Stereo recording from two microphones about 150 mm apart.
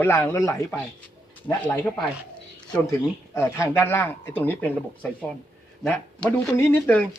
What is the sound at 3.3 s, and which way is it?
Speech, 15° left (ahead or behind).